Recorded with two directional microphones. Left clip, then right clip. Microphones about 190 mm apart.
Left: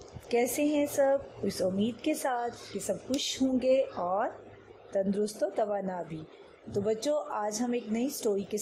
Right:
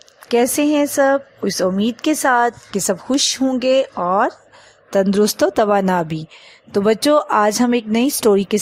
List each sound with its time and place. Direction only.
0.3 s speech: 35° right (ahead or behind)
3.6 s speech: 30° right (ahead or behind)
4.0 s speech: 45° right (ahead or behind)